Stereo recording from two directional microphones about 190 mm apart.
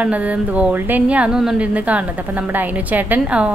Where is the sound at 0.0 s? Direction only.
5° right (ahead or behind).